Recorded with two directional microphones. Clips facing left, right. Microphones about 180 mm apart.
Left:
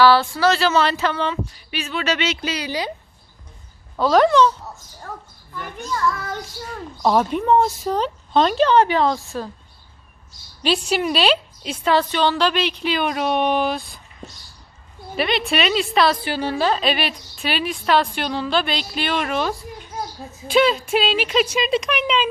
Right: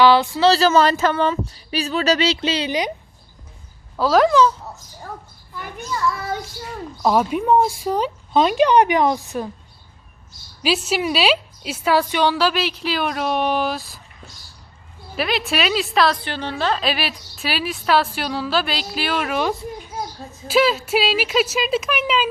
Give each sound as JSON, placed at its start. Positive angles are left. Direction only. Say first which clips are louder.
{"t": 0.0, "sound": "speech", "louder": "right 1 dB", "side_deg": -20}
{"t": 0.5, "sound": "speech", "louder": "right 3 dB", "side_deg": -40}
{"t": 3.9, "sound": "a woman's voice", "louder": "even", "side_deg": 0}
{"t": 5.5, "sound": "speech", "louder": "left 1 dB", "side_deg": -5}
{"t": 10.6, "sound": "a woman's voice", "louder": "even", "side_deg": -5}
{"t": 15.1, "sound": "a woman's voice", "louder": "left 1 dB", "side_deg": 0}